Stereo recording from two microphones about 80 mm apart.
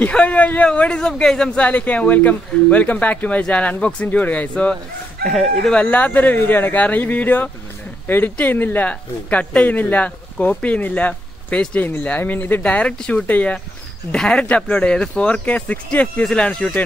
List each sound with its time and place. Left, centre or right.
0.1 s speech: centre
5.2 s speech: centre
5.7 s speech: centre
12.6 s speech: centre